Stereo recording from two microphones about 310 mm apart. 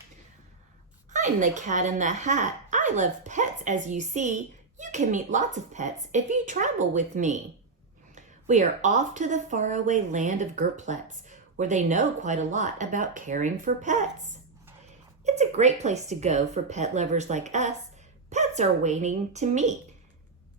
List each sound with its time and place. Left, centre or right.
1.1 s speech: right
15.2 s speech: right